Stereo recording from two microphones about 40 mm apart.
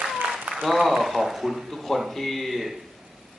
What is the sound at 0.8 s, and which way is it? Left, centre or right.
Speech, centre.